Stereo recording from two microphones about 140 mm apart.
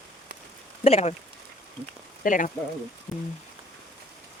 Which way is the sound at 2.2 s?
70° left (ahead or behind).